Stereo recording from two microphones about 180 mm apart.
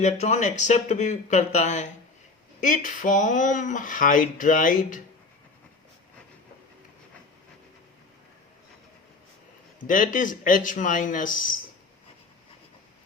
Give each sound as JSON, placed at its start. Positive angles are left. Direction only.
{"t": 0.0, "sound": "speech", "side_deg": 40}
{"t": 9.8, "sound": "speech", "side_deg": 45}